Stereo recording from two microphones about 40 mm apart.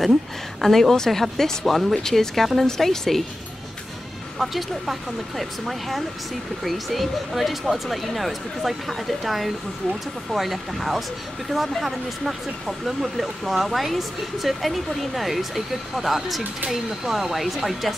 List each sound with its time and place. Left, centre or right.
0.6 s speech: centre
4.4 s speech: centre